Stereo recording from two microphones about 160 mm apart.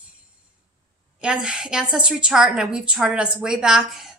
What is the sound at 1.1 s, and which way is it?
A woman's voice, 5° right (ahead or behind).